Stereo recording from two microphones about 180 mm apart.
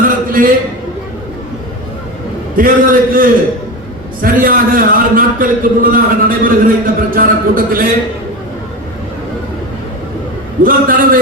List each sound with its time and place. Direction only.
0.0 s a sound: 50° right (ahead or behind)
2.6 s a man's voice: 50° right (ahead or behind)
10.6 s a man's voice: 50° right (ahead or behind)